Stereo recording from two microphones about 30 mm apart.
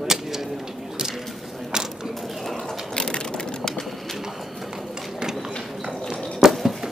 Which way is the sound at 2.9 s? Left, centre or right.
Left.